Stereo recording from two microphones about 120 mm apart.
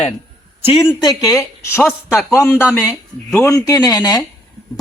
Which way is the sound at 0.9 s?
30° left (ahead or behind).